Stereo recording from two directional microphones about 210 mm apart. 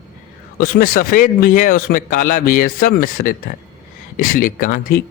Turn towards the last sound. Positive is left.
turn(degrees=40)  # may be behind; listen again after turning